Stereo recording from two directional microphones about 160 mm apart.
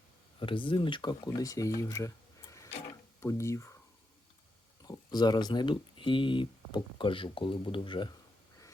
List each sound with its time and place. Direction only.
0.3 s speech: 30° left (ahead or behind)
4.9 s speech: 25° left (ahead or behind)